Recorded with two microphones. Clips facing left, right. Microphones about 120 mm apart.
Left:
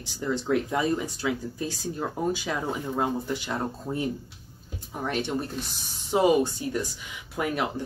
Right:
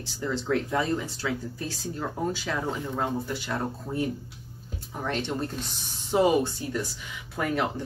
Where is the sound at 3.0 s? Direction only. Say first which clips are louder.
Left 3 dB; 15° left (ahead or behind).